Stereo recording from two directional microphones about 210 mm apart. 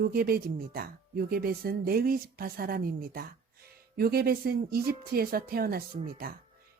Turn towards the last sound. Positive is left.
turn(degrees=-45)  # may be behind; listen again after turning